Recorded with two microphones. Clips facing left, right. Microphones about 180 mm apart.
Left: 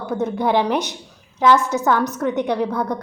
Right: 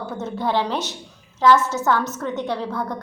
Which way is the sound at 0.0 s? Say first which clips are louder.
Left 5 dB; 15° left (ahead or behind).